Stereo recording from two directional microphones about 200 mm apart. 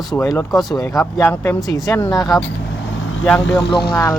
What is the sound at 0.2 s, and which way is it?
Speech, 15° left (ahead or behind).